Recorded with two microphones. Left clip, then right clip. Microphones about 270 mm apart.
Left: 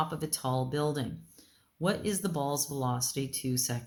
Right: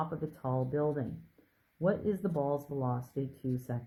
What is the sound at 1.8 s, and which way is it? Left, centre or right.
Speech, left.